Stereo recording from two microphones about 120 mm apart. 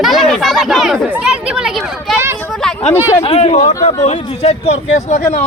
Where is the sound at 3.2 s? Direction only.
55° left (ahead or behind).